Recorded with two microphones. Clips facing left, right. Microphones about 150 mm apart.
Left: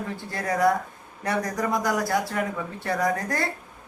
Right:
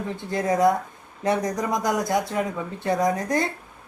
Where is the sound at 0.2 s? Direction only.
20° right (ahead or behind).